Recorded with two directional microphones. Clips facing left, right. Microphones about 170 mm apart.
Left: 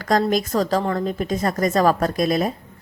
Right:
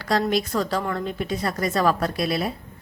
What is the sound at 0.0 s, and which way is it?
A woman's voice, 45° left (ahead or behind).